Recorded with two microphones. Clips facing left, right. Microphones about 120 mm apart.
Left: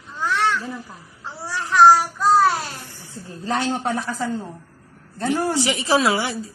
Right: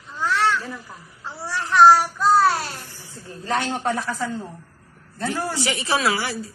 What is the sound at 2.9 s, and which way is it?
A woman's voice, 20° left (ahead or behind).